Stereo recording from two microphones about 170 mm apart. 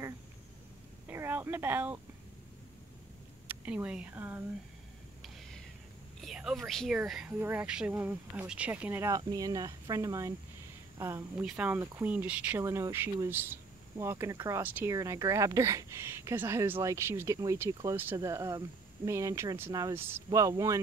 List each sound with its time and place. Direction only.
1.0 s a sound: 15° right (ahead or behind)
3.4 s speech: 10° right (ahead or behind)
6.2 s speech: centre (ahead or behind); by 20.8 s 20° right (ahead or behind)